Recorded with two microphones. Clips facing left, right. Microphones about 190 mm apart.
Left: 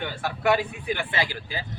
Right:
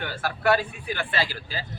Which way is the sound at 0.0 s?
20° left (ahead or behind).